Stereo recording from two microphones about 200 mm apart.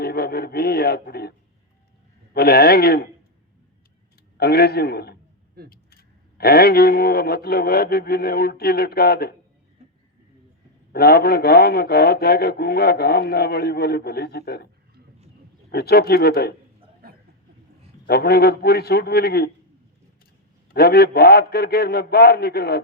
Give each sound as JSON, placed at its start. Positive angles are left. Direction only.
{"t": 0.0, "sound": "speech", "side_deg": 50}
{"t": 2.3, "sound": "a man's voice", "side_deg": 50}
{"t": 4.4, "sound": "a man's voice", "side_deg": 50}
{"t": 10.9, "sound": "a man's voice", "side_deg": 50}
{"t": 15.7, "sound": "a man's voice", "side_deg": 50}
{"t": 18.0, "sound": "a man's voice", "side_deg": 50}
{"t": 20.7, "sound": "a man's voice", "side_deg": 50}